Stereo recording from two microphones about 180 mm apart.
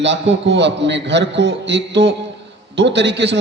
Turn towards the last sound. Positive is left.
turn(degrees=-75)  # may be behind; listen again after turning